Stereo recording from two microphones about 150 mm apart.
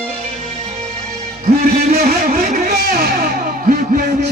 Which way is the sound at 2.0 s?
75° right (ahead or behind).